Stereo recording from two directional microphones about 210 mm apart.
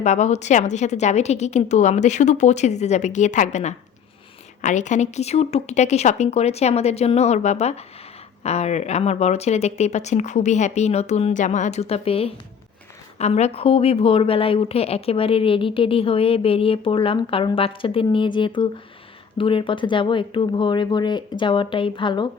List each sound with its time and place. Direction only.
0.0 s a woman's voice: 35° left (ahead or behind)